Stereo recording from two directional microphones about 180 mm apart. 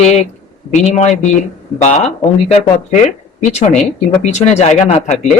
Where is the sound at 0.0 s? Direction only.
40° left (ahead or behind).